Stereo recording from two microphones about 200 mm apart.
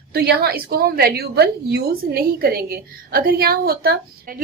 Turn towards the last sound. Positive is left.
turn(degrees=-50)  # may be behind; listen again after turning